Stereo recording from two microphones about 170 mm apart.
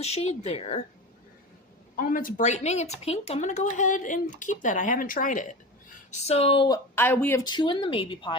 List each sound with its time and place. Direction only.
0.0 s speech: 40° left (ahead or behind)
2.0 s a woman's voice: 55° left (ahead or behind)
6.1 s speech: 40° left (ahead or behind)
6.9 s speech: 10° left (ahead or behind)
7.4 s speech: 25° left (ahead or behind)